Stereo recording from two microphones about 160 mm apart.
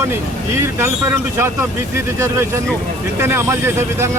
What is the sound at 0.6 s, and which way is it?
Speech, 15° right (ahead or behind).